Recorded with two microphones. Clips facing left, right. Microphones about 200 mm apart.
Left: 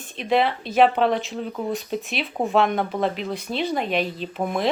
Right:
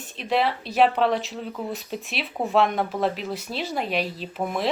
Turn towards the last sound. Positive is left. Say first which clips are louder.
# left 2 dB
turn(degrees=0)  # may be behind; listen again after turning